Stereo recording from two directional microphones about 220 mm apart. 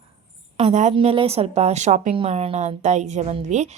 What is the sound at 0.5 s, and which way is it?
A woman's voice, 30° right (ahead or behind).